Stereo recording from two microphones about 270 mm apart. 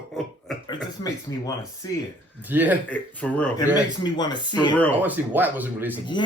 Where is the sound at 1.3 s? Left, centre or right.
Centre.